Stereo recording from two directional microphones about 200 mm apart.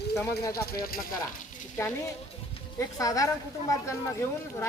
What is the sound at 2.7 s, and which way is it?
Speech, 15° left (ahead or behind).